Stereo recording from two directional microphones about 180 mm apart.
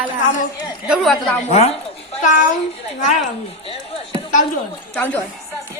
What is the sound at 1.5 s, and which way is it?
Speech, 35° left (ahead or behind).